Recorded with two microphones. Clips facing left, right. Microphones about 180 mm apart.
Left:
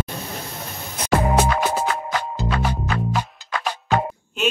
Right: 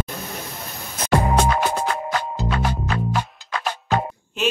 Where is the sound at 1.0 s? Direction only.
5° left (ahead or behind).